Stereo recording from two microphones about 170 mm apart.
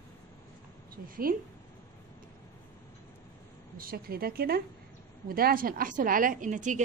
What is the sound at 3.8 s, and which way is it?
A woman's voice, 60° right (ahead or behind).